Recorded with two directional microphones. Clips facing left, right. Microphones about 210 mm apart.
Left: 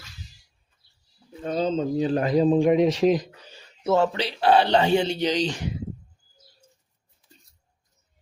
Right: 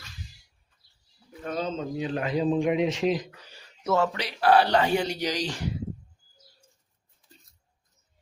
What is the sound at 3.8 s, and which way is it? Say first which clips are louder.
Speech: left 4 dB; 30° left (ahead or behind).